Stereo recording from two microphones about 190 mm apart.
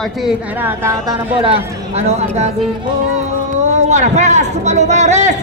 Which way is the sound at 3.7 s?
40° right (ahead or behind).